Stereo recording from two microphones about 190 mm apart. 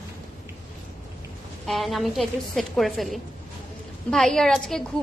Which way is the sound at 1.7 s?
Centre (ahead or behind).